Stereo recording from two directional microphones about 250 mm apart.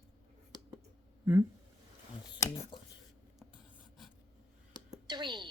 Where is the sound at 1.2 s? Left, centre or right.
Centre.